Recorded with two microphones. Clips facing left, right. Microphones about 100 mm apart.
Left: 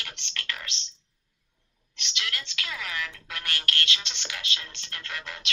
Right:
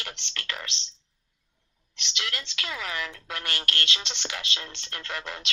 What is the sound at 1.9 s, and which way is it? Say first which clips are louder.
A woman's voice: right 1 dB; 25° right (ahead or behind).